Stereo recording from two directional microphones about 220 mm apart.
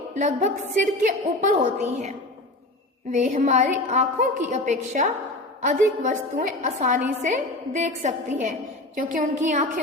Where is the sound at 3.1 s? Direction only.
35° right (ahead or behind).